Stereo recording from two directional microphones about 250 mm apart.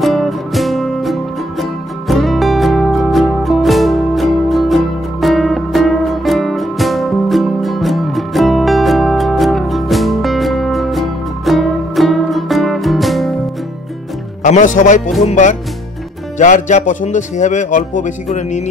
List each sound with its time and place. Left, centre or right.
0.0 s music: centre
14.4 s speech: left